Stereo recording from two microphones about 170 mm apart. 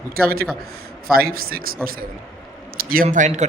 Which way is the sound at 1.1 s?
60° right (ahead or behind).